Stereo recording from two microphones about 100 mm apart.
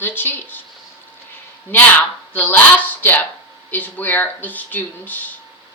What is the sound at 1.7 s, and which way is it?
A woman's voice, 20° left (ahead or behind).